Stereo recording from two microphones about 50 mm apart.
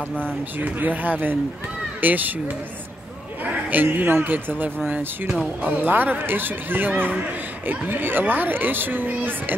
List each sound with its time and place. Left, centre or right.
0.2 s speech: right
3.7 s speech: right
7.9 s speech: right